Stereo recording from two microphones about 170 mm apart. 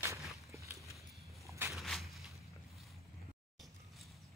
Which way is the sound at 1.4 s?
15° right (ahead or behind).